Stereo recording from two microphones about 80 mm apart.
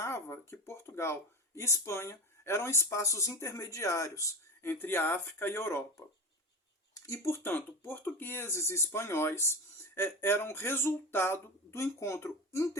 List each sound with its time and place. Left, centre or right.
0.0 s speech: left
4.6 s speech: left